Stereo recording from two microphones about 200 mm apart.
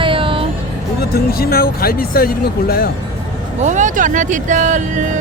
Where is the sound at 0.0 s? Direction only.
25° right (ahead or behind).